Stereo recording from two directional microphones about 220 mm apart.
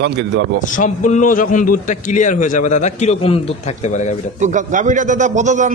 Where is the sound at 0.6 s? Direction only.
35° left (ahead or behind).